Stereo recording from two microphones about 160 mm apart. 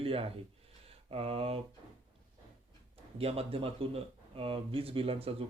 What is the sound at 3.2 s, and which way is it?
Speech, 40° right (ahead or behind).